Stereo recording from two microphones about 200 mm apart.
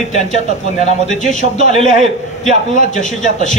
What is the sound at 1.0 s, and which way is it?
Speech, 35° left (ahead or behind).